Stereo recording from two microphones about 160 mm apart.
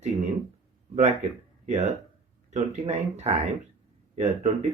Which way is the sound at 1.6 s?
45° right (ahead or behind).